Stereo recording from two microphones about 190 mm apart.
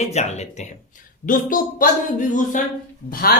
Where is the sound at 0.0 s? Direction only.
35° left (ahead or behind).